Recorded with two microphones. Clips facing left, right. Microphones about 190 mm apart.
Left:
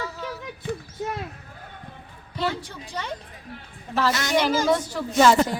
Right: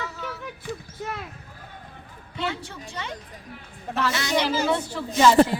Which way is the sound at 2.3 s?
40° left (ahead or behind).